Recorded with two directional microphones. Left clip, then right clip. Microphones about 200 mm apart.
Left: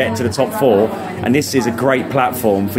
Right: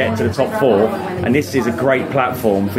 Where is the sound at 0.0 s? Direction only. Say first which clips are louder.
Even; 25° left (ahead or behind).